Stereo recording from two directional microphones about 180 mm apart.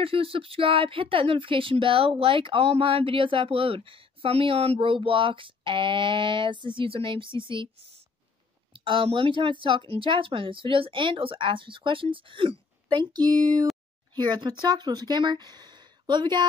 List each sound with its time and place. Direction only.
0.0 s speech: 30° right (ahead or behind)
8.7 s speech: 30° right (ahead or behind)